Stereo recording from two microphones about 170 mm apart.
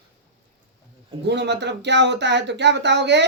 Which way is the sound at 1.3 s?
90° right.